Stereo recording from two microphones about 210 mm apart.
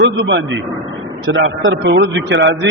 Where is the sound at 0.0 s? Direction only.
55° right (ahead or behind).